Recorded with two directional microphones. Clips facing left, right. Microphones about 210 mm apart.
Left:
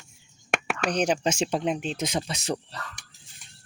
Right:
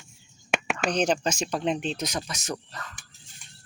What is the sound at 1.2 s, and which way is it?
Speech, 25° left (ahead or behind).